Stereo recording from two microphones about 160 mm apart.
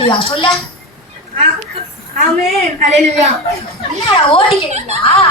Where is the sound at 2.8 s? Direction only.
40° right (ahead or behind).